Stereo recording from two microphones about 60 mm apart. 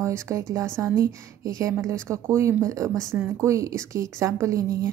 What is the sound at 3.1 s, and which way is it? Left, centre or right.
Speech, right.